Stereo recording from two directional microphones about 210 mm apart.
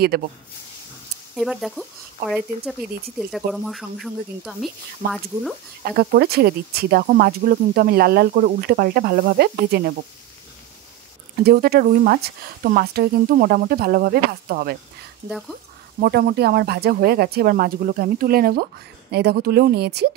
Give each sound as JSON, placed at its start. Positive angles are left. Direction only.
{"t": 0.1, "sound": "speech", "side_deg": -45}
{"t": 1.3, "sound": "speech", "side_deg": 0}
{"t": 5.0, "sound": "speech", "side_deg": -40}
{"t": 11.4, "sound": "speech", "side_deg": -45}
{"t": 15.2, "sound": "speech", "side_deg": 0}
{"t": 16.0, "sound": "speech", "side_deg": -50}